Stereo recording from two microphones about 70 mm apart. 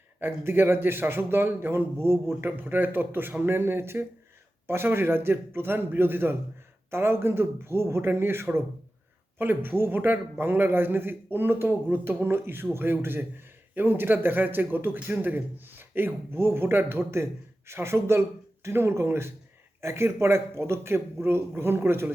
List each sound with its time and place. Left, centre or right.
0.2 s a man's voice: right